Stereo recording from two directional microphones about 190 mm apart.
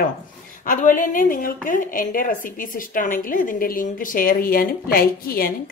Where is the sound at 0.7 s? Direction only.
40° left (ahead or behind).